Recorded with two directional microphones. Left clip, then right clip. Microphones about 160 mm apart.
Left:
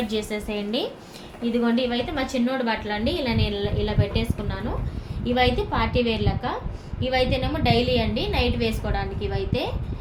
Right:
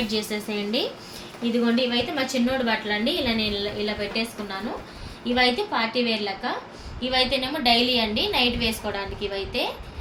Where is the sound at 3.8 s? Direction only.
45° left (ahead or behind).